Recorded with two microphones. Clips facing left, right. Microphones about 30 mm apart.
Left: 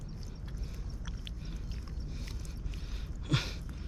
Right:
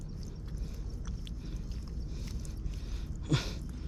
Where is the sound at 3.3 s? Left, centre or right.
Centre.